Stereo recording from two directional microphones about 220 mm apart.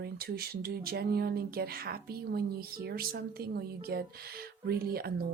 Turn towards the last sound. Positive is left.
turn(degrees=-45)  # may be behind; listen again after turning